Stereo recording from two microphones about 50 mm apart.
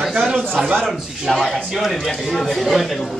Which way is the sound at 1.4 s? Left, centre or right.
Centre.